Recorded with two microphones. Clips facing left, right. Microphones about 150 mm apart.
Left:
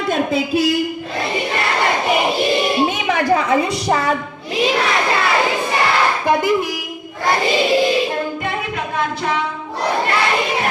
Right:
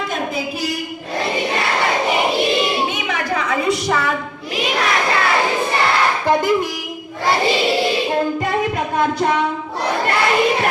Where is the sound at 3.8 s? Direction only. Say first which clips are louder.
Left 2 dB; 35° left (ahead or behind).